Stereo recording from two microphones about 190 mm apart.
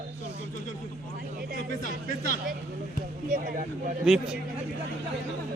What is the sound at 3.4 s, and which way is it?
Speech, 50° right (ahead or behind).